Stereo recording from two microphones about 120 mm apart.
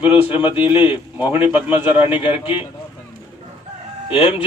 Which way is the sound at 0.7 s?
15° right (ahead or behind).